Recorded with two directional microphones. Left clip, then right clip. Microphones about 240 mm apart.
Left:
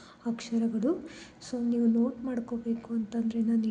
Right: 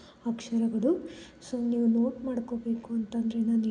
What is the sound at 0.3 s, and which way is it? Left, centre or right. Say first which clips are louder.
A woman's voice: right 1 dB; centre.